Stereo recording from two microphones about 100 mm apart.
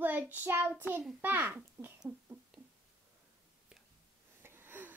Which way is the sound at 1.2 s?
20° right (ahead or behind).